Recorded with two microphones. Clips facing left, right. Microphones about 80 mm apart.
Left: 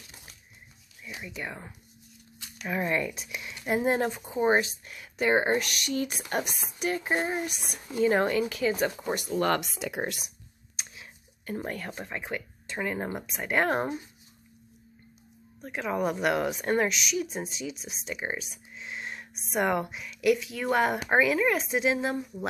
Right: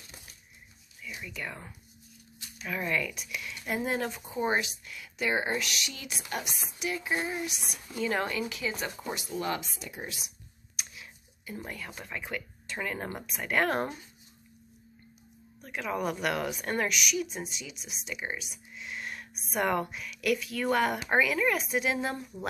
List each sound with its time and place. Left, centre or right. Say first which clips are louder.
1.2 s speech: left 2 dB; left
2.7 s speech: left 3 dB; left
9.4 s speech: left 8 dB; left
10.8 s a sound: even; left
11.4 s speech: left 6 dB; left
12.0 s speech: left 3 dB; left
15.6 s speech: left 3 dB; left